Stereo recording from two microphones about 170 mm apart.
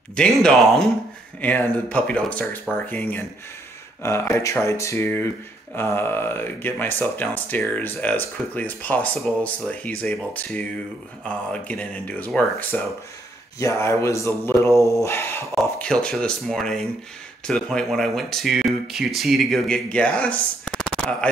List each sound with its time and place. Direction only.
0.1 s speech: 5° left (ahead or behind)